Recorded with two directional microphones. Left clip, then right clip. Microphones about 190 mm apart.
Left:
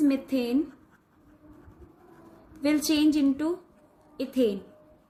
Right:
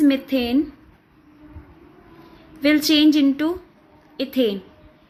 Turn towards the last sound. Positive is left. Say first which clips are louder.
# right 5 dB
turn(degrees=-15)  # may be behind; listen again after turning